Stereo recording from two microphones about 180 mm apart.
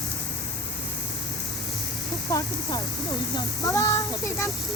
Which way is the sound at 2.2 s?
20° left (ahead or behind).